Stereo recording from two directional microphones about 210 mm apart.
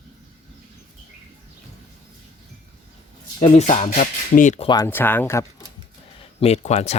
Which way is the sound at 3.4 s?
30° left (ahead or behind).